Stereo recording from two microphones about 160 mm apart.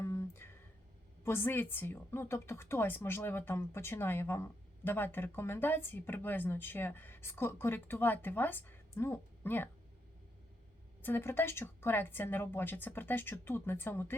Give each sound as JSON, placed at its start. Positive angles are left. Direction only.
{"t": 0.0, "sound": "a sound", "side_deg": 15}
{"t": 1.2, "sound": "a woman's voice", "side_deg": 15}
{"t": 11.0, "sound": "a woman's voice", "side_deg": 15}